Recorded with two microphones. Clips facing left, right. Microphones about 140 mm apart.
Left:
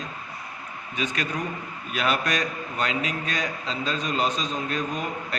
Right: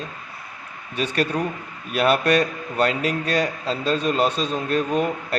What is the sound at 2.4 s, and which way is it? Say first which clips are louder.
Speech: right 7 dB; 35° right (ahead or behind).